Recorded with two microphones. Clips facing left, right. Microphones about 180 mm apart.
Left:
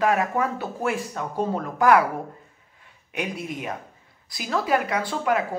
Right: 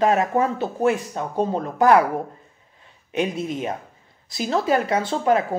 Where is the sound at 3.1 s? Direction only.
25° right (ahead or behind).